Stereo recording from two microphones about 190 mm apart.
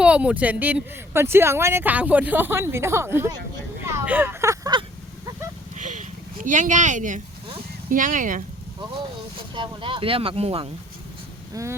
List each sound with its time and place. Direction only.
0.0 s speech: 5° right (ahead or behind)
3.8 s a sound: 10° right (ahead or behind)
5.7 s sheep: 40° right (ahead or behind)
7.9 s speech: 45° right (ahead or behind)
9.6 s speech: 25° right (ahead or behind)
11.6 s speech: 20° right (ahead or behind)